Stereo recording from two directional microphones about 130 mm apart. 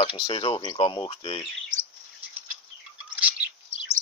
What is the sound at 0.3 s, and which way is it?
Speech, 40° left (ahead or behind).